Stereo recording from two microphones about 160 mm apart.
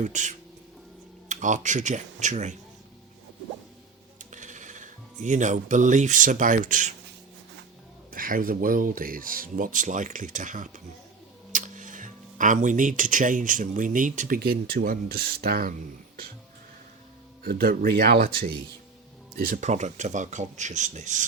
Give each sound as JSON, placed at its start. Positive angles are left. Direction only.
{"t": 0.0, "sound": "speech", "side_deg": -50}
{"t": 4.2, "sound": "speech", "side_deg": -50}
{"t": 8.1, "sound": "speech", "side_deg": -60}
{"t": 17.4, "sound": "speech", "side_deg": -70}
{"t": 19.4, "sound": "speech", "side_deg": -60}